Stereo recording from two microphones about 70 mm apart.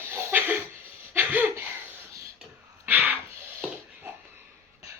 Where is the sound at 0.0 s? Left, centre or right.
Right.